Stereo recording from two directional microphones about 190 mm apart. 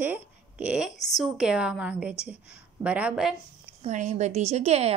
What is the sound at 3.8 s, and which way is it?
A woman's voice, 40° right (ahead or behind).